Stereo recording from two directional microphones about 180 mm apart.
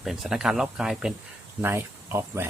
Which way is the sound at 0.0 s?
Centre (ahead or behind).